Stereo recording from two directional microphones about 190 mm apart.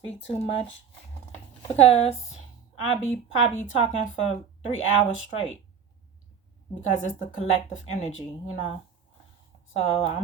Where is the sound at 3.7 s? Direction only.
35° left (ahead or behind).